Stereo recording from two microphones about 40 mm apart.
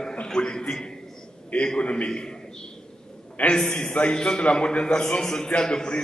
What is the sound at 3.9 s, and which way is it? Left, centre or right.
A man's voice, left.